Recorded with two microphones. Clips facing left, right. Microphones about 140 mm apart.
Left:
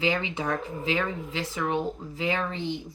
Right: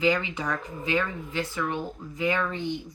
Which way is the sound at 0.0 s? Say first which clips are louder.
Right 2 dB; 25° left (ahead or behind).